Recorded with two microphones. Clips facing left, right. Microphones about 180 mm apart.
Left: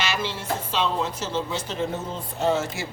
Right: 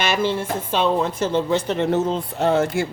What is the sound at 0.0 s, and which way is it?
Speech, 55° right (ahead or behind).